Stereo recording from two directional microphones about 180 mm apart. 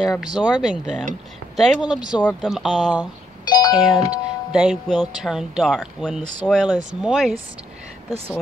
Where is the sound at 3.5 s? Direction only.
25° left (ahead or behind).